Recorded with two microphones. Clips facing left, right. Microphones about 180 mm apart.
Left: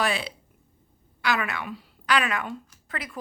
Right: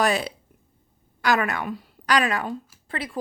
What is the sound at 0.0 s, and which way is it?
A woman's voice, 45° right (ahead or behind).